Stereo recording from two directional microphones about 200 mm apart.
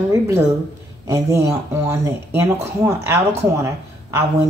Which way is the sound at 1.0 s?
15° right (ahead or behind).